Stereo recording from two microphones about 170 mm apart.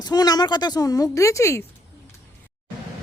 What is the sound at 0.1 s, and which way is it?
A woman's voice, 25° left (ahead or behind).